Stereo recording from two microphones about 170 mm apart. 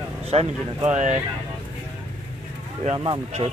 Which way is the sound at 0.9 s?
45° right (ahead or behind).